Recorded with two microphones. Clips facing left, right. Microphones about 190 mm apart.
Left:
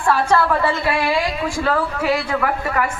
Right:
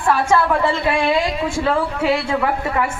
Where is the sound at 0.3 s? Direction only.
10° right (ahead or behind).